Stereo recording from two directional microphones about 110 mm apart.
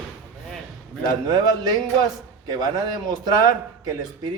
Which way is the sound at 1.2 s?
40° right (ahead or behind).